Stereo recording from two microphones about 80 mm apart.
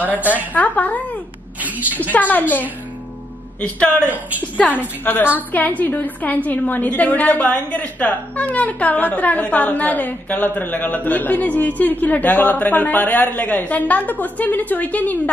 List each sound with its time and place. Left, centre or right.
0.1 s a woman's voice: right
0.5 s a woman's voice: centre
1.6 s a sound: right
2.1 s a woman's voice: left
3.6 s a woman's voice: centre